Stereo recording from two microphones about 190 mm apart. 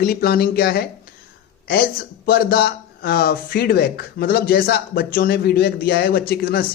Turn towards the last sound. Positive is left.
turn(degrees=55)  # may be behind; listen again after turning